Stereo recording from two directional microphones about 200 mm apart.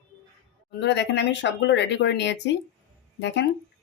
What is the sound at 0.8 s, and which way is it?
Speech, 60° left (ahead or behind).